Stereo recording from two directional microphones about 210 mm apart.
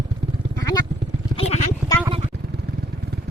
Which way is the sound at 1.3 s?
30° left (ahead or behind).